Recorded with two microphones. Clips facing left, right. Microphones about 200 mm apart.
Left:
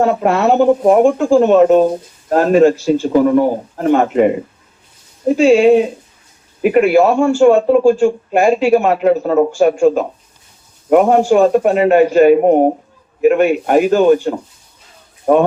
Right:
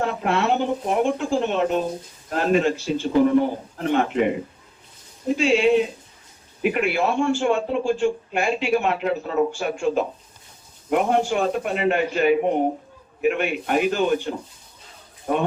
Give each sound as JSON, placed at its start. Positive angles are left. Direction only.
{"t": 0.0, "sound": "a man's voice", "side_deg": 45}
{"t": 5.4, "sound": "a man's voice", "side_deg": 45}